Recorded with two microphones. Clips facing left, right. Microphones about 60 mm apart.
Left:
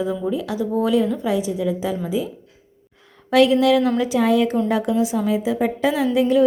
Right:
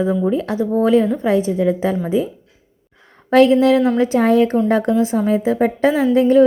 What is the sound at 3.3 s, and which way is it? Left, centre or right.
A woman's voice, right.